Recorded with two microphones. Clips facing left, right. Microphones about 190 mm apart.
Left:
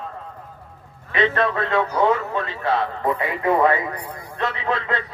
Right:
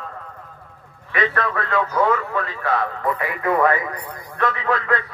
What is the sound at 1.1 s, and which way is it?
A man's voice, 25° left (ahead or behind).